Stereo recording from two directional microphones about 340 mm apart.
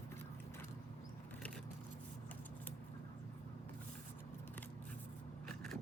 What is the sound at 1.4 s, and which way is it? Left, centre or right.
Vehicle, centre.